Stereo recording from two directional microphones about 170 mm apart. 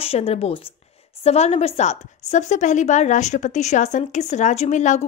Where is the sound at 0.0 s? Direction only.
35° left (ahead or behind).